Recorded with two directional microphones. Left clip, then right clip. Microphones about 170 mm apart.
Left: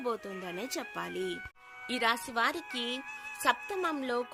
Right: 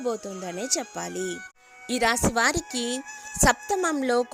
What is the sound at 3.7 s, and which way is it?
Speech, 55° right (ahead or behind).